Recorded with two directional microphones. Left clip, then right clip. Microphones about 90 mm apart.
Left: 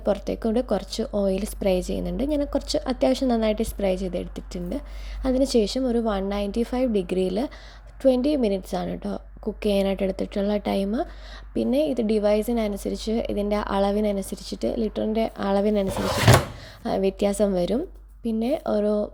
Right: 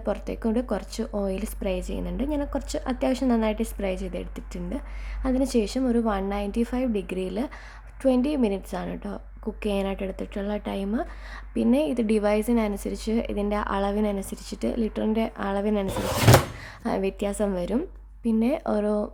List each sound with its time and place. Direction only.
0.0 s a woman's voice: 20° left (ahead or behind)
11.5 s a woman's voice: 5° left (ahead or behind)
15.4 s a woman's voice: 20° left (ahead or behind)
16.8 s a woman's voice: 10° left (ahead or behind)
17.2 s a woman's voice: 25° left (ahead or behind)
18.3 s a woman's voice: 5° left (ahead or behind)